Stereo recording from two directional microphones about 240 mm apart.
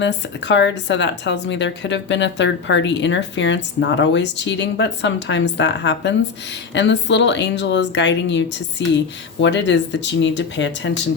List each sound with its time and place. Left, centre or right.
0.0 s speech: left